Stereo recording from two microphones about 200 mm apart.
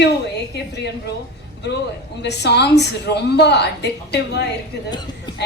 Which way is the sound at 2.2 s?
55° left (ahead or behind).